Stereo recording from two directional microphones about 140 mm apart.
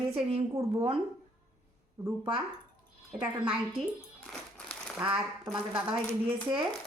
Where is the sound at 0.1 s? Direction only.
50° right (ahead or behind).